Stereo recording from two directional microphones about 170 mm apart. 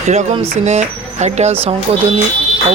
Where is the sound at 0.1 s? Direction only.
40° right (ahead or behind).